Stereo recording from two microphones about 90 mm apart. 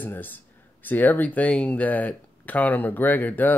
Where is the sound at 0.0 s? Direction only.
20° left (ahead or behind).